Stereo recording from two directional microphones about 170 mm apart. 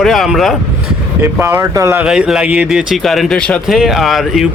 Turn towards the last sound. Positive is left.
turn(degrees=0)  # may be behind; listen again after turning